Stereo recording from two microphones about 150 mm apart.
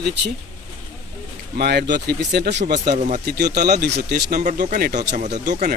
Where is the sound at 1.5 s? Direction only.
90° right.